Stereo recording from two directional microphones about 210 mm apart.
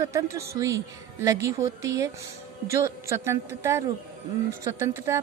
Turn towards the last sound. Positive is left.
turn(degrees=-15)  # may be behind; listen again after turning